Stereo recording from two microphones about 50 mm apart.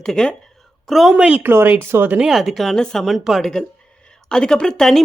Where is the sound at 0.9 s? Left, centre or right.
Centre.